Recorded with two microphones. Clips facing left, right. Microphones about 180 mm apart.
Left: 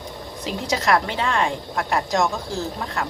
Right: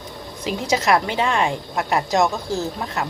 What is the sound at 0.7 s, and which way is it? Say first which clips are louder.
A woman's voice: right 2 dB; 15° right (ahead or behind).